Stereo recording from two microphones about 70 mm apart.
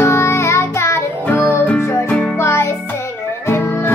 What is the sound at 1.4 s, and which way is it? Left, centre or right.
Music, left.